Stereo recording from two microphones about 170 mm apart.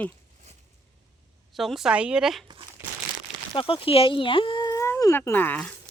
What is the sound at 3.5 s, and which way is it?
Speech, 30° left (ahead or behind).